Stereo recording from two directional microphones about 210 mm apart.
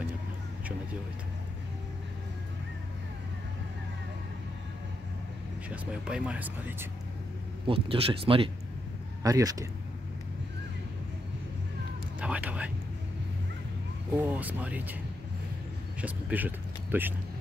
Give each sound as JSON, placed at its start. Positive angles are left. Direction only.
{"t": 5.7, "sound": "speech", "side_deg": -5}
{"t": 7.6, "sound": "speech", "side_deg": -25}
{"t": 12.2, "sound": "a sound", "side_deg": -5}
{"t": 14.1, "sound": "speech", "side_deg": -5}
{"t": 16.0, "sound": "speech", "side_deg": -10}